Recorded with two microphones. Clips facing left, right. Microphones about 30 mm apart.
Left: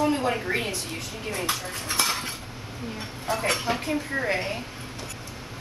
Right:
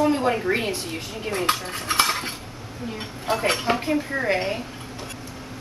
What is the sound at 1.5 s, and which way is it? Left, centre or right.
Speech, right.